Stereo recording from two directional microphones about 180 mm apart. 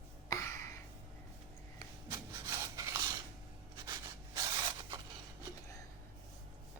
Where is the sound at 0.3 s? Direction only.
15° left (ahead or behind).